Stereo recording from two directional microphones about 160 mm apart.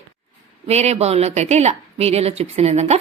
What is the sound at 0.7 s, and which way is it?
A woman's voice, 40° right (ahead or behind).